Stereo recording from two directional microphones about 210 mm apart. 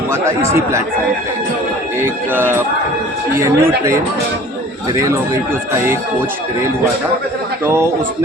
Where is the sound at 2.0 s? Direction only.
10° right (ahead or behind).